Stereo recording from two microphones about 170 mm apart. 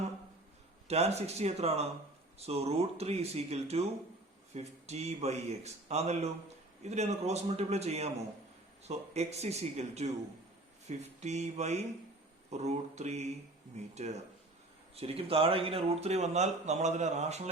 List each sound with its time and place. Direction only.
0.9 s speech: 40° right (ahead or behind)